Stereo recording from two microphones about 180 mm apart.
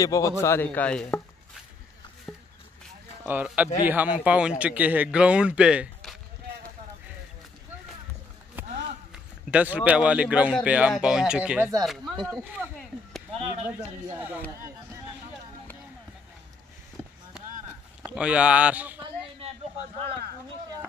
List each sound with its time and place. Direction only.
0.0 s chopping: 20° left (ahead or behind)
2.3 s a sound: 5° left (ahead or behind)
3.3 s a man's voice: 10° right (ahead or behind)
8.6 s a sound: 45° right (ahead or behind)
9.1 s a man's voice: 5° right (ahead or behind)
12.3 s a man's voice: 10° right (ahead or behind)
12.7 s a sound: centre (ahead or behind)
13.7 s a man's voice: 10° right (ahead or behind)
18.0 s a man's voice: 5° right (ahead or behind)